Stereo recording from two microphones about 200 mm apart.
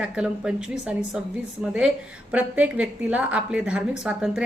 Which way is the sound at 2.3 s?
5° right (ahead or behind).